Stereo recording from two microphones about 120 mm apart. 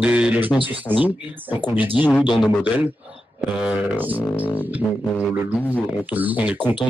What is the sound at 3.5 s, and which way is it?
Speech, 10° right (ahead or behind).